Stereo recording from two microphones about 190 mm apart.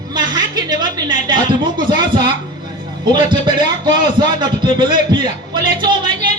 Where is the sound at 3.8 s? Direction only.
25° right (ahead or behind).